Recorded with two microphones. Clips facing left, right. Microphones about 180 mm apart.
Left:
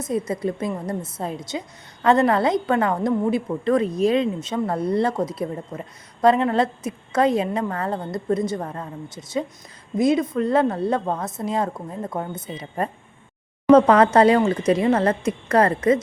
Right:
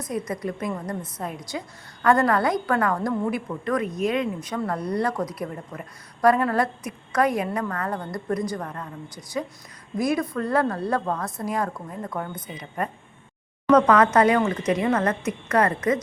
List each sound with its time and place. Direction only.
0.0 s a woman's voice: 25° left (ahead or behind)